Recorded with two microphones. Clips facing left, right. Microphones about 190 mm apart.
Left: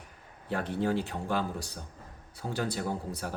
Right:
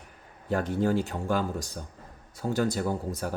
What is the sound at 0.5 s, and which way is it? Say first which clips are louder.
Speech: right 4 dB; 45° right (ahead or behind).